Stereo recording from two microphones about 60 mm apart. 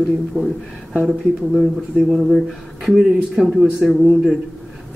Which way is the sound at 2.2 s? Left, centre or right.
Centre.